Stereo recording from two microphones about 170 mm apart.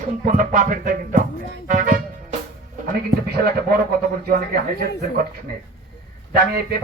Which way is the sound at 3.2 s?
65° right (ahead or behind).